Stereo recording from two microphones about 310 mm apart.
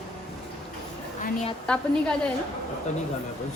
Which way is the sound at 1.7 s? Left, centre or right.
Centre.